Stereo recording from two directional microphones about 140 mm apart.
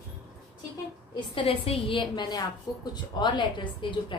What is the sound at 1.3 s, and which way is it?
A woman's voice, 40° left (ahead or behind).